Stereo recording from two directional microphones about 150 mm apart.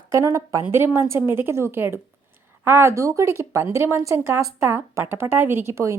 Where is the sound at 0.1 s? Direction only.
20° right (ahead or behind).